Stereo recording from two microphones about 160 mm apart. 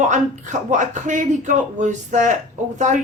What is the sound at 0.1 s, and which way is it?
Speech, 50° right (ahead or behind).